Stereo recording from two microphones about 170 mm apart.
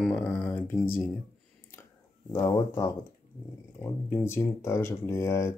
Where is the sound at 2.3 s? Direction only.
20° left (ahead or behind).